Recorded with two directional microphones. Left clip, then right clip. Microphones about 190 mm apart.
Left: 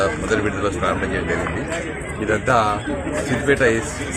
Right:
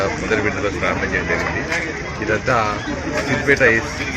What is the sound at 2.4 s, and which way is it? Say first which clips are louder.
Speech: left 3 dB; 10° left (ahead or behind).